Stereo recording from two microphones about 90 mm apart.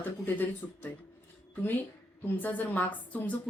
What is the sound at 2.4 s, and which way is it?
Speech, 20° left (ahead or behind).